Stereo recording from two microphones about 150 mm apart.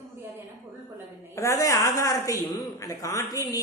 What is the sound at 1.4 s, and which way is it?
A man's voice, 20° left (ahead or behind).